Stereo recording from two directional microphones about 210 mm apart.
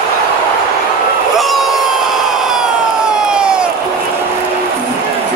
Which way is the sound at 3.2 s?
5° right (ahead or behind).